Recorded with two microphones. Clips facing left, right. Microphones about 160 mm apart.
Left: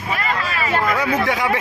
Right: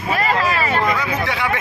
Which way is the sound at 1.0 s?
50° left (ahead or behind).